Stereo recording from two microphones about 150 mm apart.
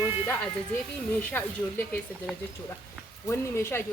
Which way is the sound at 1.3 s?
10° left (ahead or behind).